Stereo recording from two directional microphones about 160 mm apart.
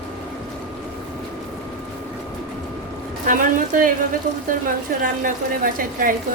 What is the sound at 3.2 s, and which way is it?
Speech, 60° right (ahead or behind).